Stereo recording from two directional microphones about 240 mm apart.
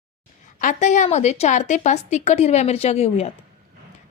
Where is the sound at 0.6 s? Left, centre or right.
Left.